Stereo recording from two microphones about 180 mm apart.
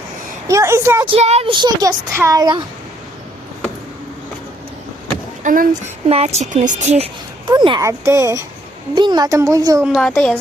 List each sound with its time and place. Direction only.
0.4 s speech: 15° right (ahead or behind)
1.0 s speech: 35° right (ahead or behind)
5.4 s speech: 45° right (ahead or behind)
6.1 s a woman's voice: 35° right (ahead or behind)
7.4 s speech: 25° right (ahead or behind)
9.8 s a woman's voice: 5° right (ahead or behind)
10.1 s a woman's voice: 5° left (ahead or behind)